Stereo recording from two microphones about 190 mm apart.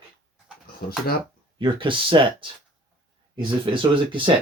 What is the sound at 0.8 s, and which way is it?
Speech, 55° left (ahead or behind).